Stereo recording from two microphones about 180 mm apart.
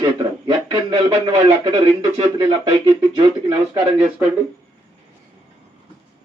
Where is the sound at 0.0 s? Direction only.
25° right (ahead or behind).